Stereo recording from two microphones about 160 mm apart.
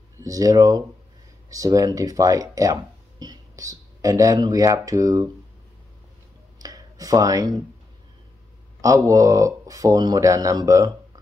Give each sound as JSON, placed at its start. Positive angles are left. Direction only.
{"t": 0.2, "sound": "speech", "side_deg": -20}
{"t": 6.6, "sound": "a sound", "side_deg": -20}
{"t": 8.8, "sound": "speech", "side_deg": -20}